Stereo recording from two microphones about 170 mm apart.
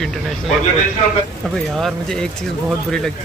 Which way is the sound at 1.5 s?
Centre (ahead or behind).